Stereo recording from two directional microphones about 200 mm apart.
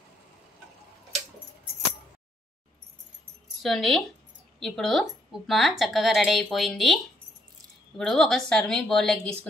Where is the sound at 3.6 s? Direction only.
Centre (ahead or behind).